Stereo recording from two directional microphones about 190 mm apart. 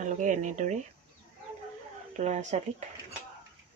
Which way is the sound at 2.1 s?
40° right (ahead or behind).